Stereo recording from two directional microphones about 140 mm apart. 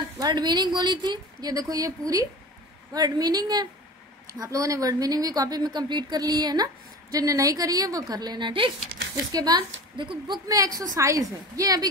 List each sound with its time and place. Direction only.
0.2 s a woman's voice: 30° right (ahead or behind)